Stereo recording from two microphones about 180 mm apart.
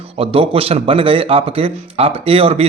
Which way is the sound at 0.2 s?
30° right (ahead or behind).